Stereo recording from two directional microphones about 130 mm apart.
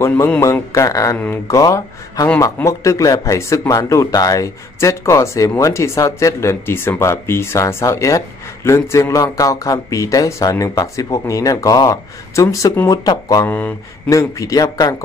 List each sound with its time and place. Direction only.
0.4 s speech: 25° left (ahead or behind)
1.1 s speech: 15° left (ahead or behind)
1.5 s speech: 25° left (ahead or behind)
13.5 s speech: 15° left (ahead or behind)